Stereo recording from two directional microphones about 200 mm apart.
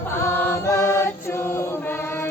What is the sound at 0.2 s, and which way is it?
Mantra, 15° left (ahead or behind).